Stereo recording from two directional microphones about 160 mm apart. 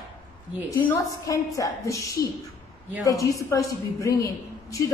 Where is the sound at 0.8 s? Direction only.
20° left (ahead or behind).